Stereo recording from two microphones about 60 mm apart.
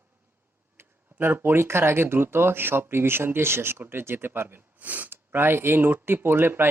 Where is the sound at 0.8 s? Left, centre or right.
Right.